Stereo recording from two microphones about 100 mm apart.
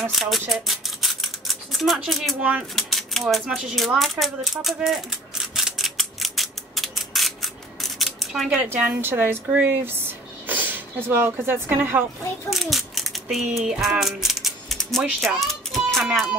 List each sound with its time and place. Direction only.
0.1 s scissors: centre (ahead or behind)
2.7 s a sound: centre (ahead or behind)
3.4 s speech: 5° right (ahead or behind)
5.5 s mechanisms: centre (ahead or behind)
8.7 s speech: 15° right (ahead or behind)
12.4 s a child's voice: centre (ahead or behind)